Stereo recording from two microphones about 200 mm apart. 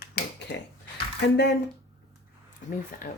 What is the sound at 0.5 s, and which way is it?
Speech, 60° left (ahead or behind).